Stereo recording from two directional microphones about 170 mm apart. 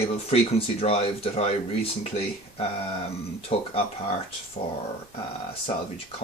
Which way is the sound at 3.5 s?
35° left (ahead or behind).